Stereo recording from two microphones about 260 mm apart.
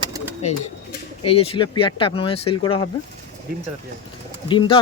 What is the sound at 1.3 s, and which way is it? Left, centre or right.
Speech, left.